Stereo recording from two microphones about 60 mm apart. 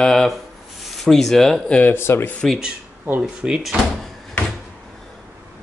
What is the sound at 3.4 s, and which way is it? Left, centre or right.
Speech, centre.